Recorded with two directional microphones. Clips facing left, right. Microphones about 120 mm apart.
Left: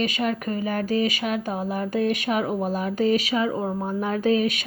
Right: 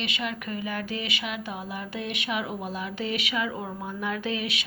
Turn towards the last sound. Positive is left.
turn(degrees=45)  # may be behind; listen again after turning